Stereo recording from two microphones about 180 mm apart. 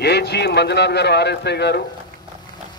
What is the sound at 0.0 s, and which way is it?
Speech, 65° left (ahead or behind).